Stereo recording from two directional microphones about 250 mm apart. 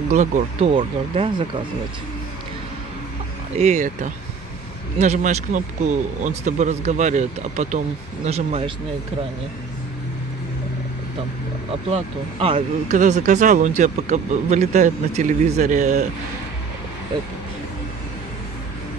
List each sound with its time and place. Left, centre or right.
0.1 s speech: right
3.5 s speech: right
11.9 s speech: right